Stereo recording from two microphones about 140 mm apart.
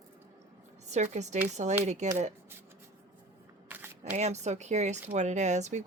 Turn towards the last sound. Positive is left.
turn(degrees=-55)  # may be behind; listen again after turning